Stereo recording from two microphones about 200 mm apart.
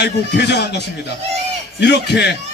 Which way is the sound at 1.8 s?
60° left (ahead or behind).